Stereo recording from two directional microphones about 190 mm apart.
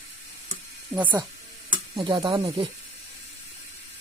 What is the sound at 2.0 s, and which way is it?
Speech, 20° right (ahead or behind).